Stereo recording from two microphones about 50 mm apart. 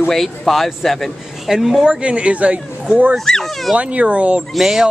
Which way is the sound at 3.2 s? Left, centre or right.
Centre.